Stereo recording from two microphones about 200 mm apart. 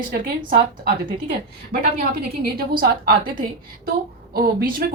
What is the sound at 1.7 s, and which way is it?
Speech, 45° right (ahead or behind).